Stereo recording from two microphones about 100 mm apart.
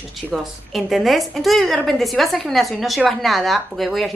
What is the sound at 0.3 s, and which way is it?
A woman's voice, centre (ahead or behind).